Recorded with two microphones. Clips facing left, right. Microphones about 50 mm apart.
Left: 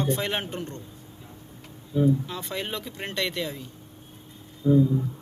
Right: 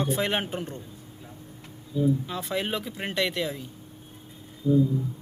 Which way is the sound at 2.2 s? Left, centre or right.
Centre.